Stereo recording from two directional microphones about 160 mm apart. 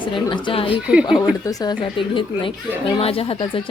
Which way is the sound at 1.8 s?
30° left (ahead or behind).